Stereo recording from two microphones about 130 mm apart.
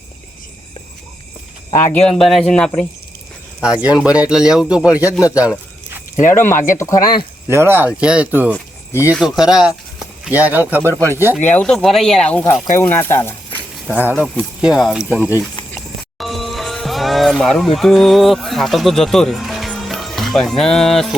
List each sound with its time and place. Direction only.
1.7 s speech: 20° left (ahead or behind)
2.0 s speech: 5° left (ahead or behind)
3.6 s speech: 10° right (ahead or behind)
6.2 s speech: 80° left
6.7 s speech: 25° left (ahead or behind)
7.4 s speech: 20° right (ahead or behind)
8.5 s a sound: 20° left (ahead or behind)
9.1 s speech: 5° right (ahead or behind)
11.5 s speech: 5° left (ahead or behind)
13.8 s speech: 10° right (ahead or behind)
14.8 s speech: centre (ahead or behind)
16.1 s speech: centre (ahead or behind)